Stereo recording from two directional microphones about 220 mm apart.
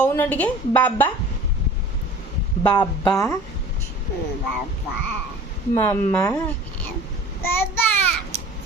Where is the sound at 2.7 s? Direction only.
20° left (ahead or behind).